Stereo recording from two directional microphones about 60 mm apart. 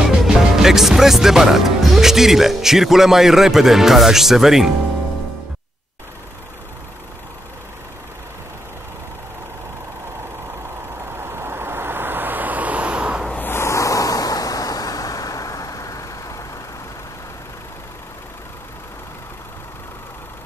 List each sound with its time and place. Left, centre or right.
0.2 s speech: centre
11.1 s vehicle: right; by 13.2 s centre
13.4 s vehicle: left